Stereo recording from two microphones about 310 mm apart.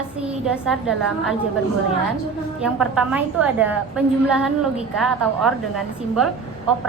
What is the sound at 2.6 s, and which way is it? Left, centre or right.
A woman's voice, centre.